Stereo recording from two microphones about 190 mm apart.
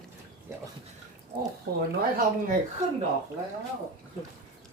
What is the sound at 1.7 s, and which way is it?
Speech, 55° right (ahead or behind).